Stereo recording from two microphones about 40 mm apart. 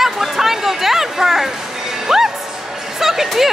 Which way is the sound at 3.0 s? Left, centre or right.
Centre.